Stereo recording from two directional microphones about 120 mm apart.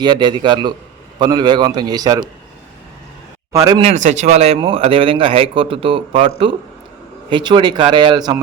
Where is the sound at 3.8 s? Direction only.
80° right.